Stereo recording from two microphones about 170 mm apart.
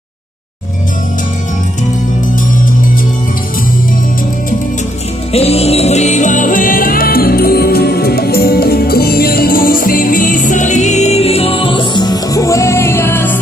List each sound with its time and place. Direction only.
5.3 s music: 35° left (ahead or behind); by 13.4 s 15° left (ahead or behind)